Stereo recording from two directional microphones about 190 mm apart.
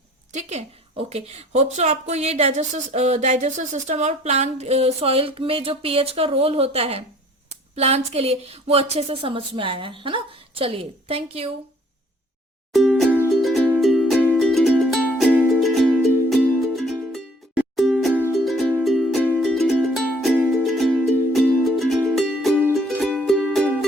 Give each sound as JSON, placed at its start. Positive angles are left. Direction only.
{"t": 0.3, "sound": "a woman's voice", "side_deg": -35}
{"t": 12.7, "sound": "music", "side_deg": 0}